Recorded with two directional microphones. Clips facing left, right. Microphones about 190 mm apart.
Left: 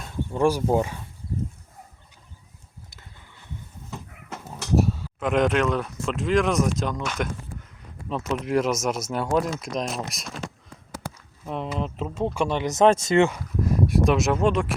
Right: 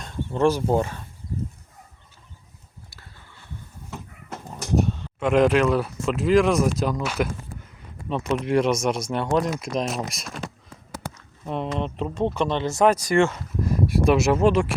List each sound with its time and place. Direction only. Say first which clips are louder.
0.0 s speech: right 1 dB; 10° left (ahead or behind)
2.9 s a sound: right 1 dB; 20° left (ahead or behind)
4.8 s speech: even; 5° left (ahead or behind)
11.4 s speech: right 2 dB; centre (ahead or behind); by 13.4 s 20° left (ahead or behind)
13.6 s speech: left 1 dB; centre (ahead or behind)